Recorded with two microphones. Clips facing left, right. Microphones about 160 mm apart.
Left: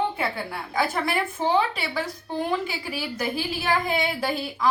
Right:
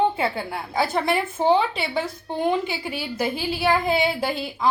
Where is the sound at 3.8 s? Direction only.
30° right (ahead or behind).